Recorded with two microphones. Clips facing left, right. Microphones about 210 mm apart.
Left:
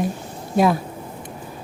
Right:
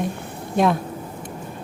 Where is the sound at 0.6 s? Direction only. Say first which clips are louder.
Left 1 dB; 5° left (ahead or behind).